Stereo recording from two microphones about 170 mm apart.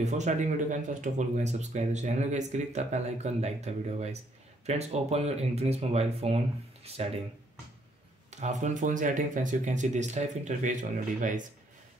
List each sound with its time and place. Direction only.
0.0 s speech: 45° right (ahead or behind)
8.3 s speech: 45° right (ahead or behind)